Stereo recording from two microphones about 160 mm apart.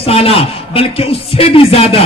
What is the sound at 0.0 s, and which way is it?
A man's voice, 40° left (ahead or behind).